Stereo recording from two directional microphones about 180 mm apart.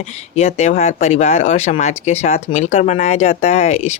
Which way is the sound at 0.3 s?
35° left (ahead or behind).